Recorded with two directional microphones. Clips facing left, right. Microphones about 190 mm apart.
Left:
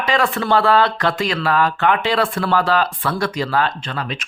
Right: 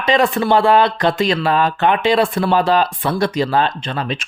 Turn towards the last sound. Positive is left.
turn(degrees=-25)  # may be behind; listen again after turning